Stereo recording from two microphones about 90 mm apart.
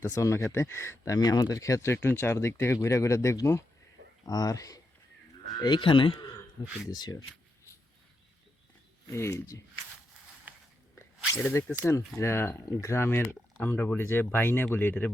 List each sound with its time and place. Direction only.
0.1 s speech: 35° left (ahead or behind); by 5.8 s 50° left (ahead or behind)
5.8 s speech: 70° left (ahead or behind)
6.9 s speech: 50° left (ahead or behind)
9.0 s speech: 30° left (ahead or behind)
11.3 s speech: 20° left (ahead or behind)
11.8 s speech: 35° left (ahead or behind)